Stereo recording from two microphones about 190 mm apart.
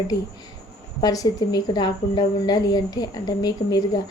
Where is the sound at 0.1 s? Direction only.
20° left (ahead or behind).